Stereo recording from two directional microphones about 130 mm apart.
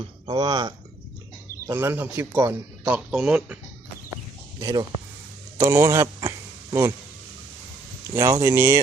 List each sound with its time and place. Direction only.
0.0 s speech: 35° right (ahead or behind)
1.6 s a man's voice: 20° right (ahead or behind)
4.6 s speech: 30° right (ahead or behind)
5.5 s a sound: 25° right (ahead or behind)
8.1 s speech: 25° right (ahead or behind)